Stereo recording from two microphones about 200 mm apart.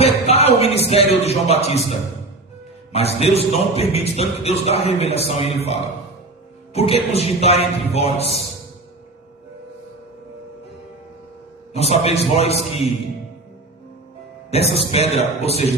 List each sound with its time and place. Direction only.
0.0 s a man's voice: 30° left (ahead or behind)
2.9 s a man's voice: 30° left (ahead or behind)
11.7 s a man's voice: 30° left (ahead or behind)
14.8 s a man's voice: 30° left (ahead or behind)